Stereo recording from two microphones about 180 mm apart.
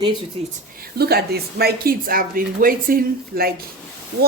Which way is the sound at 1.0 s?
60° right (ahead or behind).